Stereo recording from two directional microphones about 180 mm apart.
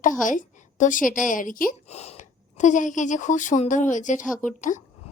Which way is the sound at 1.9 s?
35° left (ahead or behind).